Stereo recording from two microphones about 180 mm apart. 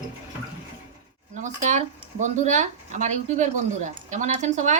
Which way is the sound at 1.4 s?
45° right (ahead or behind).